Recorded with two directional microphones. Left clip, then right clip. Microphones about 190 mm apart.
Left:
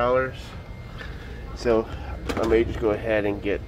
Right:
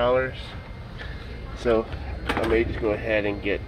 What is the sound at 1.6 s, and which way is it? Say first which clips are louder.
Speech: even; 15° left (ahead or behind).